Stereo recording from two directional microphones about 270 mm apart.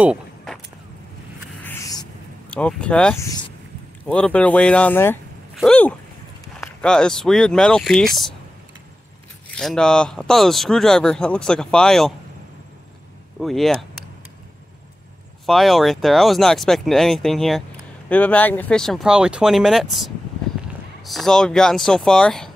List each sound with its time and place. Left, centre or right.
0.0 s a sound: centre
1.6 s a sound: centre
2.5 s speech: centre
9.6 s speech: centre
13.4 s speech: centre
15.4 s speech: centre